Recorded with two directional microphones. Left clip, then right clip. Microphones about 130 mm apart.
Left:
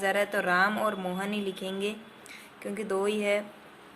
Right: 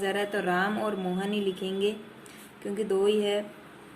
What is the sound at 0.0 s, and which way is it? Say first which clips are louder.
Speech: left 2 dB; 40° left (ahead or behind).